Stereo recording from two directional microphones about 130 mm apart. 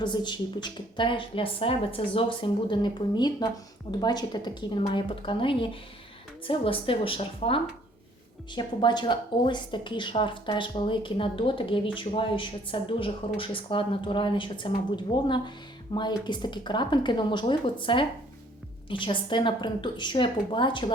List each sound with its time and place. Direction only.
0.0 s a woman's voice: 35° left (ahead or behind)
8.5 s speech: 35° left (ahead or behind)